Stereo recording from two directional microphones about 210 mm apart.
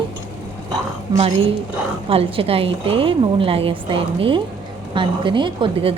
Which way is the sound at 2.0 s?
25° right (ahead or behind).